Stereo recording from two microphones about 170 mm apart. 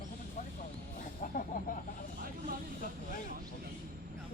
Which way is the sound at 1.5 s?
55° left (ahead or behind).